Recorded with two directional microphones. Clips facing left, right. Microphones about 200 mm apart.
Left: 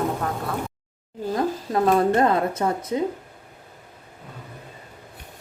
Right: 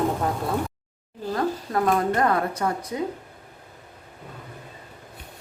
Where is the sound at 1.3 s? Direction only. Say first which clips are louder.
Left 1 dB; 20° left (ahead or behind).